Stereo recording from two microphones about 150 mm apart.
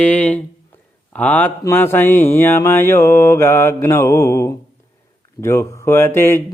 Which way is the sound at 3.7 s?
20° left (ahead or behind).